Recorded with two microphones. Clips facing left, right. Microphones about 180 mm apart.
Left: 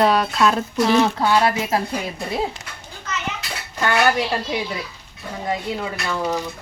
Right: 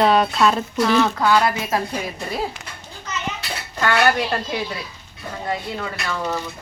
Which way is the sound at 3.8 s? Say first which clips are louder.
Even; 15° left (ahead or behind).